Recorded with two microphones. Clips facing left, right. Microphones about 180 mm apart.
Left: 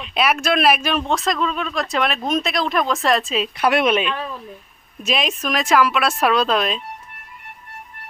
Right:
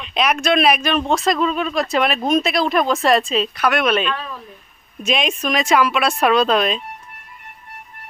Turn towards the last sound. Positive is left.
turn(degrees=0)  # may be behind; listen again after turning